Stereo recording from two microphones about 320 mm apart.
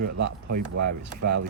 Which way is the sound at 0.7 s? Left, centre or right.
Right.